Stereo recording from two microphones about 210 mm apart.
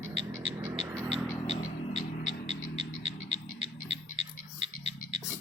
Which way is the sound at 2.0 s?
30° left (ahead or behind).